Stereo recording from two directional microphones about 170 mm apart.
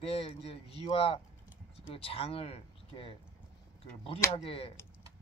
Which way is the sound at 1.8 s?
35° left (ahead or behind).